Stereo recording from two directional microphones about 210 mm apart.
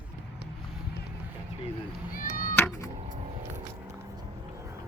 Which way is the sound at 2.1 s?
45° left (ahead or behind).